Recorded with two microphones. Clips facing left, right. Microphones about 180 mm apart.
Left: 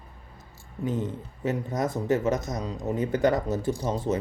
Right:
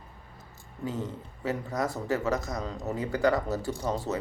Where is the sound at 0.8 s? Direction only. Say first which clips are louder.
Left 4 dB; 20° left (ahead or behind).